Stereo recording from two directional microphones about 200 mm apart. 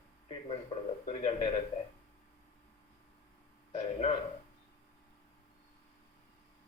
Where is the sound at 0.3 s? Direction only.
25° left (ahead or behind).